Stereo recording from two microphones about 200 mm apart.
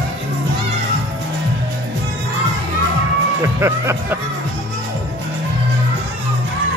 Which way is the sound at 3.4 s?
15° right (ahead or behind).